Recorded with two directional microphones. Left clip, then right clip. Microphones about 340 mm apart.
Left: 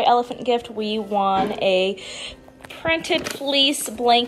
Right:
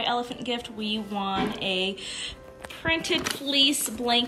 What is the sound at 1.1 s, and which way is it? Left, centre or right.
Speech, centre.